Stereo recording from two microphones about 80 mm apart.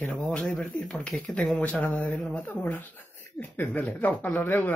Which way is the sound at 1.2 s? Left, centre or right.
Centre.